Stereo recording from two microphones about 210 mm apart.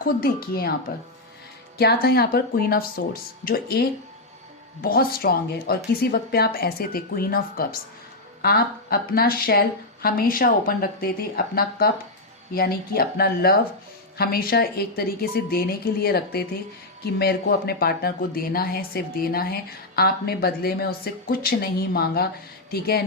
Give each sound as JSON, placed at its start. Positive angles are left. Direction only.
{"t": 0.0, "sound": "speech", "side_deg": 45}